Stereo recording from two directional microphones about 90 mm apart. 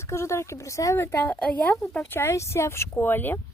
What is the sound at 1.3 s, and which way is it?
Speech, 15° left (ahead or behind).